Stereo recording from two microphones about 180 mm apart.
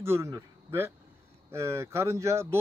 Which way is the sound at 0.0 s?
15° right (ahead or behind).